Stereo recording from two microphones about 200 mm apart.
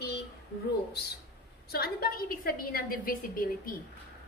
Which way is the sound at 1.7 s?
50° left (ahead or behind).